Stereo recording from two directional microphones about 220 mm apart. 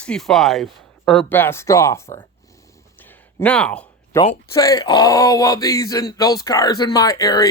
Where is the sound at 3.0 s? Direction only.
5° left (ahead or behind).